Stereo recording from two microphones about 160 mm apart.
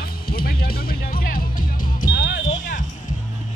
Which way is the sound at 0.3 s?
70° left (ahead or behind).